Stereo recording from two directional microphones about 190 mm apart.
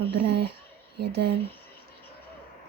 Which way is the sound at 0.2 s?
60° right (ahead or behind).